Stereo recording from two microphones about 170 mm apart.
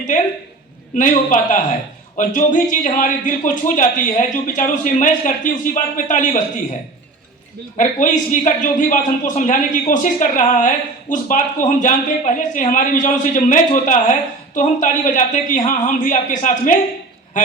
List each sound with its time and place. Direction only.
0.9 s a man's voice: 50° left (ahead or behind)
7.8 s a man's voice: 50° left (ahead or behind)